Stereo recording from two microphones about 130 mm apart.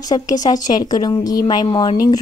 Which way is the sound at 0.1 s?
30° left (ahead or behind).